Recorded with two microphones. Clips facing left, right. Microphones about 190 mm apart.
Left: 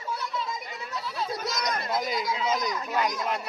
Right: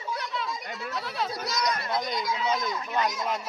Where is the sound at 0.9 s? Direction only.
65° right (ahead or behind).